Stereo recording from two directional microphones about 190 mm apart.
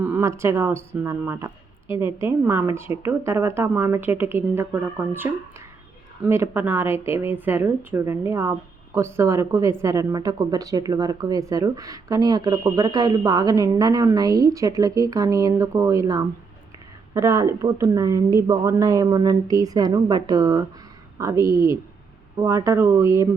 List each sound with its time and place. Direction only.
0.0 s a woman's voice: 10° right (ahead or behind)